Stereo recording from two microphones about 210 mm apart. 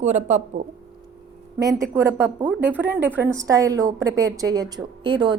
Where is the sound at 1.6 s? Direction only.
15° right (ahead or behind).